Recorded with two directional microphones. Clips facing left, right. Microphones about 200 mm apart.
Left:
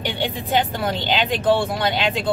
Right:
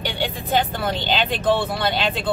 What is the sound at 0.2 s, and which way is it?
Speech, 15° left (ahead or behind).